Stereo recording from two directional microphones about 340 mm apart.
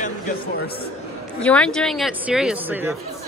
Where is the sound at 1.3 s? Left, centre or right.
Centre.